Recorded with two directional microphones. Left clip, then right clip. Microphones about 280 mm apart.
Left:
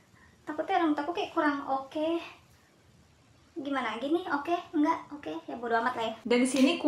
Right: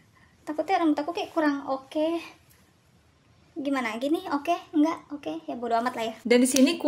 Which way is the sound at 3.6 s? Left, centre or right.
Right.